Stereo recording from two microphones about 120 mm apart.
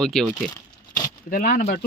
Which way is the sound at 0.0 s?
5° left (ahead or behind).